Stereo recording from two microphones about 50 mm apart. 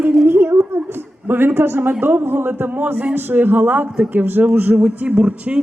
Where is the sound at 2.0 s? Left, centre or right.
Right.